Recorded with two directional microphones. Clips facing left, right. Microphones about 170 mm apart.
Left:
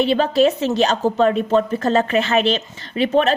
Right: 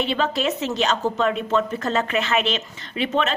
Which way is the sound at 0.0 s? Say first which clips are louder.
Left 7 dB; 35° left (ahead or behind).